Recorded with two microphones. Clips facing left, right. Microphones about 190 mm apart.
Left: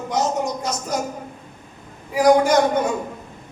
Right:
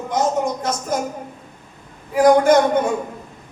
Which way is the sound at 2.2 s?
50° right (ahead or behind).